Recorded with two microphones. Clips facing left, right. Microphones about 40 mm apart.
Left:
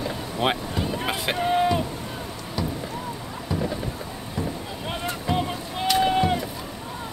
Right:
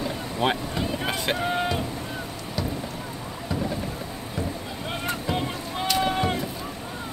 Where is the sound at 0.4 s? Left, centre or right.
Centre.